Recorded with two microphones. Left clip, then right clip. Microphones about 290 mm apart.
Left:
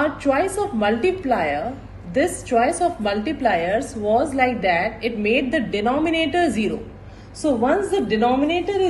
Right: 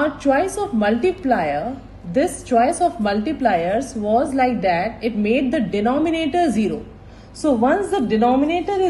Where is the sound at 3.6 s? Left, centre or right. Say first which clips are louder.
Right 1 dB; right.